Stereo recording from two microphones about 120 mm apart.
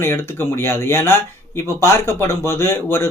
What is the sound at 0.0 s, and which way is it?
Speech, 20° left (ahead or behind).